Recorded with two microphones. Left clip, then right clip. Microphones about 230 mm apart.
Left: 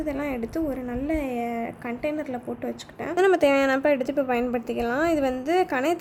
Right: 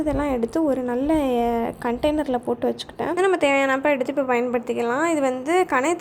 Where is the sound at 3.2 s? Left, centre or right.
Centre.